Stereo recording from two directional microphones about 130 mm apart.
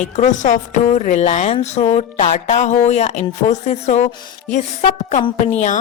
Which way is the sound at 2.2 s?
65° left (ahead or behind).